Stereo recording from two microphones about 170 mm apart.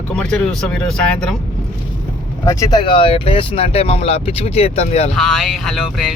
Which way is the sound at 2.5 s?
20° left (ahead or behind).